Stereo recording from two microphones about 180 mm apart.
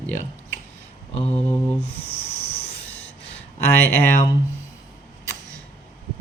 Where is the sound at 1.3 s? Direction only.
10° left (ahead or behind).